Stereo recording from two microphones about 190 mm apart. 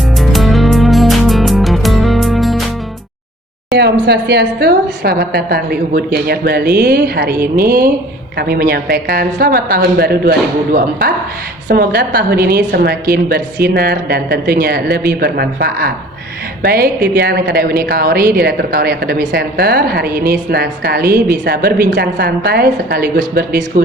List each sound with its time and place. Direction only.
0.2 s music: centre (ahead or behind)
3.7 s a woman's voice: 60° right (ahead or behind)